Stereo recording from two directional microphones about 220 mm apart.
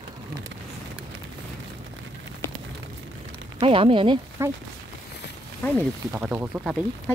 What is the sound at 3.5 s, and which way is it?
Speech, 25° right (ahead or behind).